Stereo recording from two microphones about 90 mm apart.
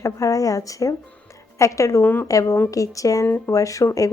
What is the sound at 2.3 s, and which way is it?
Speech, 40° left (ahead or behind).